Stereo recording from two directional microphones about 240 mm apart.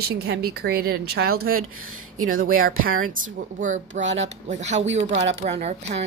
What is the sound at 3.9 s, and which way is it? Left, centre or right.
Speech, right.